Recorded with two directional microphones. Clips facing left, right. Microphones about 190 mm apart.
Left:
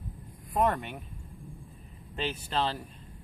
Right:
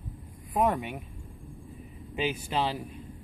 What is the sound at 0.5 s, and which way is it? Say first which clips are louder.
Speech: right 1 dB; 5° right (ahead or behind).